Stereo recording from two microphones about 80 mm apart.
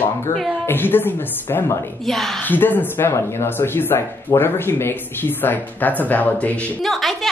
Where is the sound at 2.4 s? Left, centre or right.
Left.